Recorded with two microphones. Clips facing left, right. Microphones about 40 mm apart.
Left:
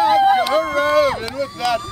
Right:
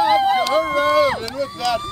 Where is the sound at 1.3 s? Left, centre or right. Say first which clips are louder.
Left 1 dB; centre.